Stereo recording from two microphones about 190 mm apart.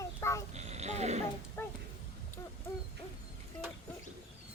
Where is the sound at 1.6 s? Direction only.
15° left (ahead or behind).